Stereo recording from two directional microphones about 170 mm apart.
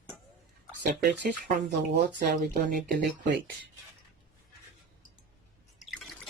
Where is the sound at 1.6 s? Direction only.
45° right (ahead or behind).